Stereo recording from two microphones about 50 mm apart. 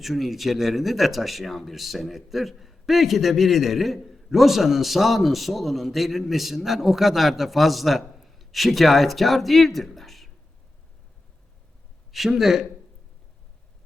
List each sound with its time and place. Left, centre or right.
0.0 s speech: centre
12.1 s speech: centre